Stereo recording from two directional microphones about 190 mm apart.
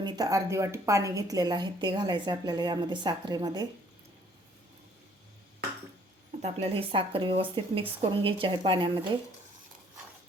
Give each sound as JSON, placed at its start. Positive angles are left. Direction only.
{"t": 0.0, "sound": "a woman's voice", "side_deg": -20}
{"t": 6.4, "sound": "a woman's voice", "side_deg": -30}